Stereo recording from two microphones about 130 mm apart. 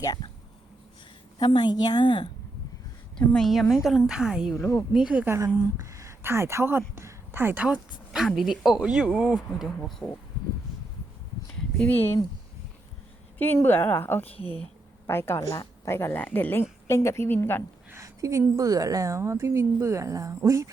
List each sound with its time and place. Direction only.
0.0 s speech: 30° left (ahead or behind)
1.4 s a woman's voice: 35° left (ahead or behind)
3.2 s a woman's voice: 5° left (ahead or behind)
13.4 s speech: 15° left (ahead or behind)
14.3 s speech: 45° left (ahead or behind)
15.0 s a woman's voice: 20° left (ahead or behind)
17.9 s a woman's voice: 25° right (ahead or behind)